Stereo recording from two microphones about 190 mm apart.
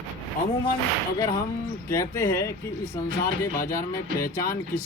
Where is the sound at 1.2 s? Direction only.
20° left (ahead or behind).